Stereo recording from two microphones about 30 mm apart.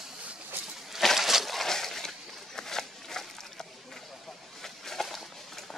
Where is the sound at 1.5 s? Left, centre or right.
Centre.